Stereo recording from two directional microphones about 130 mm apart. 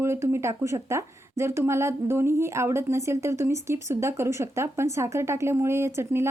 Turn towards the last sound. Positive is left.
turn(degrees=-20)  # may be behind; listen again after turning